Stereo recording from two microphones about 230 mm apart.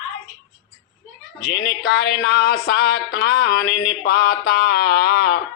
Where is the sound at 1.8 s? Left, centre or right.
Left.